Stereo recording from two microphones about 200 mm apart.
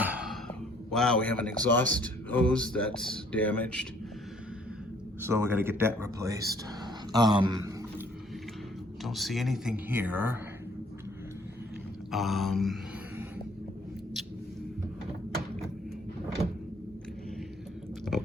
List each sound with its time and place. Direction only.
0.0 s speech: 5° right (ahead or behind)
5.2 s a man's voice: 10° right (ahead or behind)
9.0 s speech: centre (ahead or behind)
12.1 s speech: centre (ahead or behind)